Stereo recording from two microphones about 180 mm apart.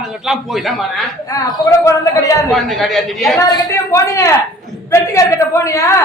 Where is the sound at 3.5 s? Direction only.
15° left (ahead or behind).